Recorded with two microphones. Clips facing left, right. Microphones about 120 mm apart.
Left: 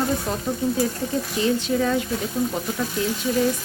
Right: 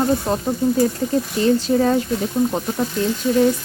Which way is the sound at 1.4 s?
40° right (ahead or behind).